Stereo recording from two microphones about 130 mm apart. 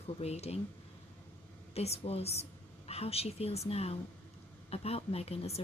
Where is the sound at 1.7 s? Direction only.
50° left (ahead or behind).